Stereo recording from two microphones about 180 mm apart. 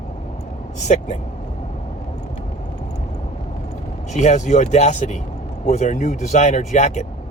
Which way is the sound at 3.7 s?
40° left (ahead or behind).